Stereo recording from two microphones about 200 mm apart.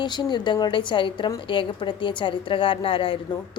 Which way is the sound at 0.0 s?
20° left (ahead or behind).